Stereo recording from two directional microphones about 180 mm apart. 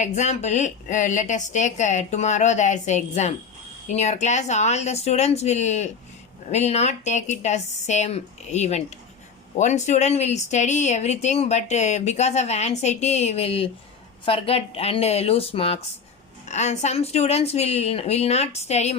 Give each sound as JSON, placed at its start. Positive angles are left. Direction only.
{"t": 0.0, "sound": "speech", "side_deg": 40}